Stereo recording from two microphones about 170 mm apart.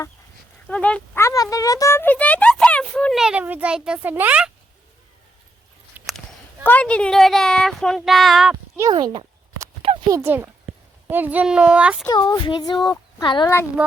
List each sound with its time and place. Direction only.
0.7 s speech: 5° left (ahead or behind)
6.1 s speech: 5° left (ahead or behind)
8.9 s a sound: 25° right (ahead or behind)
10.2 s speech: 10° right (ahead or behind)
12.0 s speech: 25° left (ahead or behind)